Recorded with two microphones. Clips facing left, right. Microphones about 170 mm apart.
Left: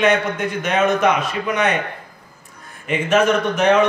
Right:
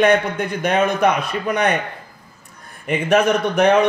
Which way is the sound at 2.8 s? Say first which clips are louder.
Even; 60° right (ahead or behind).